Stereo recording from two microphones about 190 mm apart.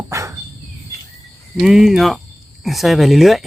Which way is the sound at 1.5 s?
Centre (ahead or behind).